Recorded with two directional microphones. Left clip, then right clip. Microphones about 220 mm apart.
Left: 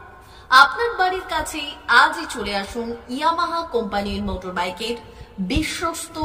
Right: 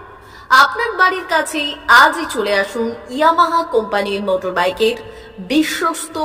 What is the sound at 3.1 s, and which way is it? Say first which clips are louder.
A woman's voice: right 8 dB; 15° right (ahead or behind).